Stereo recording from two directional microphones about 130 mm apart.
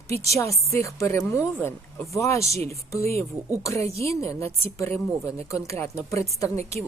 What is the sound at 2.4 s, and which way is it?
Speech, 55° right (ahead or behind).